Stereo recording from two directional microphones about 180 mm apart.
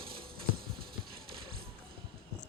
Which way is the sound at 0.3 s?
55° right (ahead or behind).